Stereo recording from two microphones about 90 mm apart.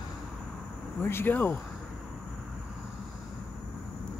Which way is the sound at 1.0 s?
25° left (ahead or behind).